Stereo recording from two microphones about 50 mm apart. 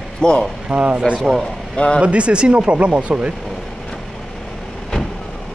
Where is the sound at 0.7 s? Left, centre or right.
Right.